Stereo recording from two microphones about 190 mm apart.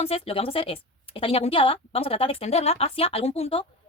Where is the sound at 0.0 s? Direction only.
30° left (ahead or behind).